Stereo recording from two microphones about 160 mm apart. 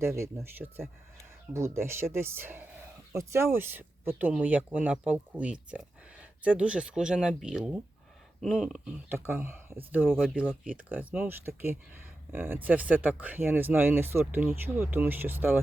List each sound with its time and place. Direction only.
0.0 s speech: 20° right (ahead or behind); by 9.0 s centre (ahead or behind)
9.0 s speech: 15° right (ahead or behind)